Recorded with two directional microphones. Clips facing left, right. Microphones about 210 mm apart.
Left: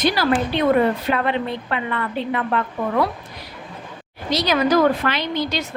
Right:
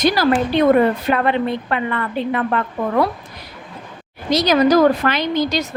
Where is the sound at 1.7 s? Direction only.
50° right (ahead or behind).